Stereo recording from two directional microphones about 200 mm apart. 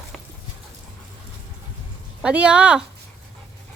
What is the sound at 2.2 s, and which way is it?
Speech, 5° right (ahead or behind).